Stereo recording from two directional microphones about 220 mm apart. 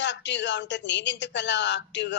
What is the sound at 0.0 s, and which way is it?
A woman's voice, 55° left (ahead or behind).